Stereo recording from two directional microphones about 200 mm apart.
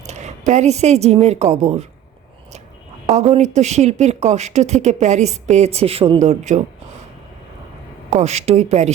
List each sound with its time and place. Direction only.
0.0 s a woman's voice: 35° right (ahead or behind)
3.1 s speech: 30° right (ahead or behind)
8.1 s speech: 35° right (ahead or behind)